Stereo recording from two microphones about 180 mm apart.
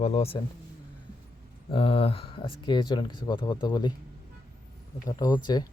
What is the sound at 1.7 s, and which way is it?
Speech, 30° left (ahead or behind).